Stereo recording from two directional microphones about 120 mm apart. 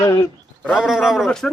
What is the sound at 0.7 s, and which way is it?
Speech, 5° right (ahead or behind).